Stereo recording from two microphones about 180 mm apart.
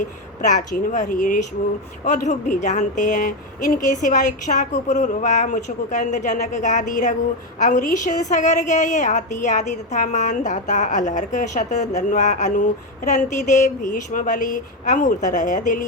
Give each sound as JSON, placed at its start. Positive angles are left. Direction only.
{"t": 0.0, "sound": "a woman's voice", "side_deg": 45}